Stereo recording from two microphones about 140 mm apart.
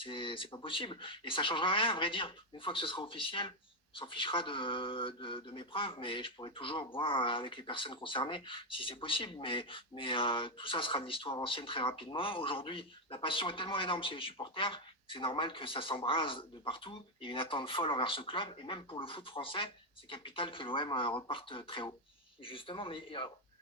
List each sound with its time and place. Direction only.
0.0 s speech: 40° left (ahead or behind)